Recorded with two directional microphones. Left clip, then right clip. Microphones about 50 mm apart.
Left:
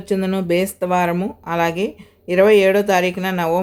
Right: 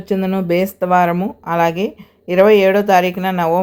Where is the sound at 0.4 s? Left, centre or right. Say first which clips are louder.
Right 4 dB; right.